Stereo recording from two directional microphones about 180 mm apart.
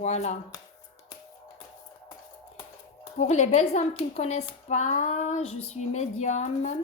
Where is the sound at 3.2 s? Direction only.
40° left (ahead or behind).